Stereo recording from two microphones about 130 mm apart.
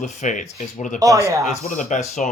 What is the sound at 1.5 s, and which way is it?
Speech, 65° left (ahead or behind).